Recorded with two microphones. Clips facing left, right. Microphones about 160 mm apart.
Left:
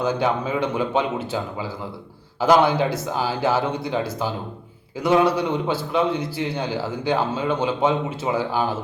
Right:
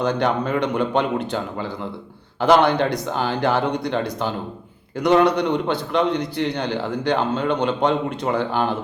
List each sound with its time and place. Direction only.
0.0 s a man's voice: 5° left (ahead or behind)